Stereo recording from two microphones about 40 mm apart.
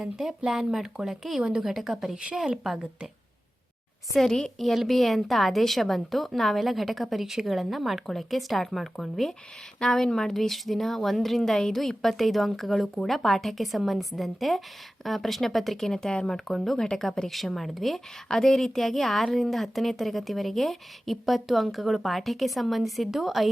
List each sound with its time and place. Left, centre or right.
0.0 s speech: centre
1.4 s a woman's voice: right
1.6 s speech: centre
4.1 s a child's voice: centre
4.7 s a woman's voice: centre